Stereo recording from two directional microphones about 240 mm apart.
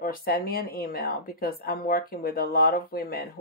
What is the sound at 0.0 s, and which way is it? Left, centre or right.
A woman's voice, left.